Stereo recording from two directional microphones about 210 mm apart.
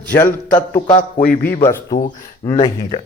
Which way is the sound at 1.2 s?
10° left (ahead or behind).